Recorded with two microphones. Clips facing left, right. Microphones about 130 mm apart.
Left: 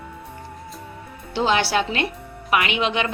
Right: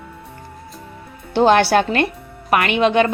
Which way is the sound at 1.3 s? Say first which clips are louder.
Right 7 dB; 55° right (ahead or behind).